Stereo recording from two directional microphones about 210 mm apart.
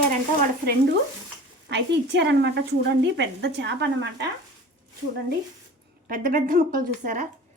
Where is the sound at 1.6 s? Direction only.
55° right (ahead or behind).